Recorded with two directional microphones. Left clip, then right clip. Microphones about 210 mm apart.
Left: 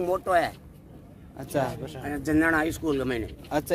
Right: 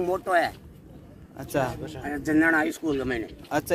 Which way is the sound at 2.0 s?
15° left (ahead or behind).